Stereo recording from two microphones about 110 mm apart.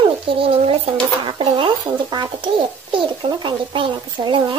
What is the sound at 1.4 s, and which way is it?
A child's voice, 50° right (ahead or behind).